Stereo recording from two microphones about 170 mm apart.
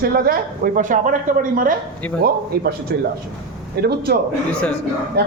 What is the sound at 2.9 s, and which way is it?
A man's voice, 70° right (ahead or behind).